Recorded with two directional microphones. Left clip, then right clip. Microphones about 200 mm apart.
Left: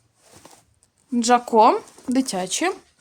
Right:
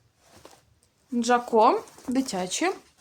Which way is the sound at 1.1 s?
40° left (ahead or behind).